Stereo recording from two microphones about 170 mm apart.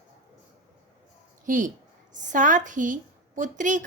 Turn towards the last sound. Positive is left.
turn(degrees=-50)  # may be behind; listen again after turning